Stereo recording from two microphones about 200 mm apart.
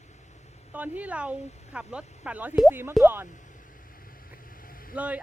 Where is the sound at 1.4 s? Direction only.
35° left (ahead or behind).